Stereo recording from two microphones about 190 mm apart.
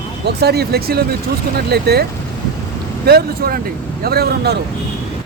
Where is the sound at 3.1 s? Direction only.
55° right (ahead or behind).